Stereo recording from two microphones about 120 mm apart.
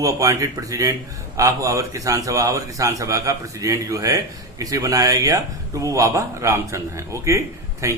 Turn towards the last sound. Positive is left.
turn(degrees=-25)  # may be behind; listen again after turning